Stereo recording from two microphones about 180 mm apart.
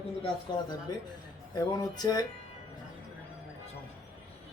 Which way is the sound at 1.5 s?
20° left (ahead or behind).